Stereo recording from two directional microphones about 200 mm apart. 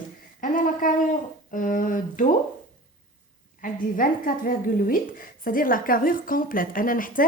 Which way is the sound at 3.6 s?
45° left (ahead or behind).